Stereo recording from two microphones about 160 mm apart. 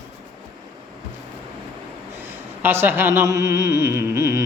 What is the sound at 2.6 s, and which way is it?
Speech, 15° right (ahead or behind).